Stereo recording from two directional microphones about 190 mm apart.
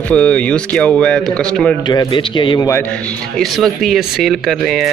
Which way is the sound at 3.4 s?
Centre (ahead or behind).